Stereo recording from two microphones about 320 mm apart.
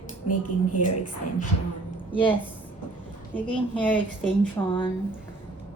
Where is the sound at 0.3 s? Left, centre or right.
Left.